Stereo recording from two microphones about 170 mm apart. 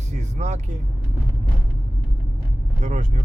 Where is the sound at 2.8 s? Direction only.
45° right (ahead or behind).